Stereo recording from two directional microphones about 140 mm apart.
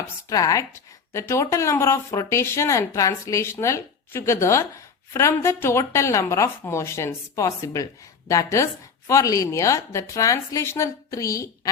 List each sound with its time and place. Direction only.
0.0 s speech: 25° left (ahead or behind)